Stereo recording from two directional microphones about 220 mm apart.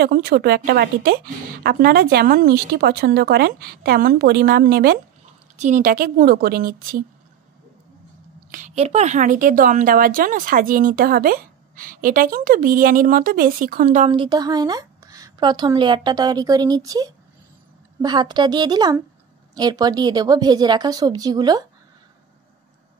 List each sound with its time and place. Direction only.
0.0 s a woman's voice: 45° right (ahead or behind)
8.5 s a woman's voice: 35° right (ahead or behind)
14.1 s a woman's voice: 20° right (ahead or behind)